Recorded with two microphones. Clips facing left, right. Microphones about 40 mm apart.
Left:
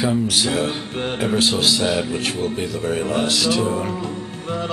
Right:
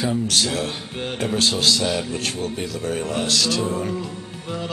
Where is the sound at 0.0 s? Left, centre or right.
Centre.